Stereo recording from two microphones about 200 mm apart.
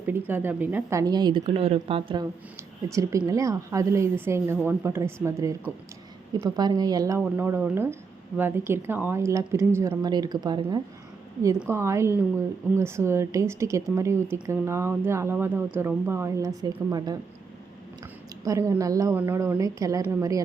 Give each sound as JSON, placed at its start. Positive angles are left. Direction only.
{"t": 0.0, "sound": "a woman's voice", "side_deg": -10}
{"t": 2.9, "sound": "a woman's voice", "side_deg": -15}
{"t": 18.4, "sound": "a woman's voice", "side_deg": -15}